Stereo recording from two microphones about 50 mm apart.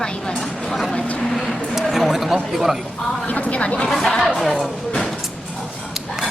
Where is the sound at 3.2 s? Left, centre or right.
Left.